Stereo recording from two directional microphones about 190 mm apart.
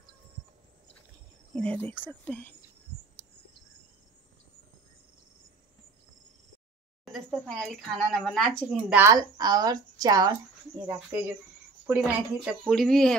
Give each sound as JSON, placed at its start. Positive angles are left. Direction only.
{"t": 1.5, "sound": "speech", "side_deg": 5}
{"t": 7.1, "sound": "speech", "side_deg": 0}
{"t": 9.0, "sound": "speech", "side_deg": -20}
{"t": 11.8, "sound": "speech", "side_deg": -10}